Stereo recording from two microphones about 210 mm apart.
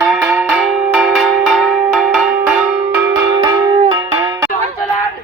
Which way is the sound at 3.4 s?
20° right (ahead or behind).